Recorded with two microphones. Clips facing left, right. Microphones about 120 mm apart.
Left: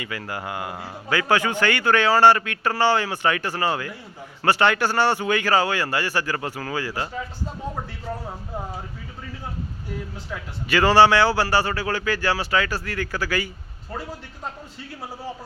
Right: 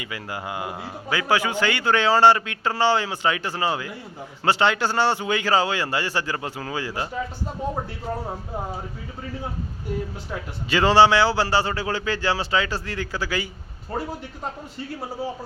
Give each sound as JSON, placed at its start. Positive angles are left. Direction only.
{"t": 0.0, "sound": "a man's voice", "side_deg": -15}
{"t": 10.7, "sound": "speech", "side_deg": -20}